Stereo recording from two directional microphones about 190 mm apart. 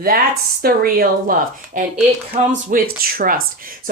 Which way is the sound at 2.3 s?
40° right (ahead or behind).